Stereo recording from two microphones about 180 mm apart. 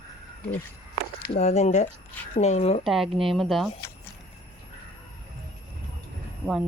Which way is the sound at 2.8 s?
Centre (ahead or behind).